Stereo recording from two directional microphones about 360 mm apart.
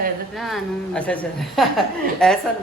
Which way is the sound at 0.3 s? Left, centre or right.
Centre.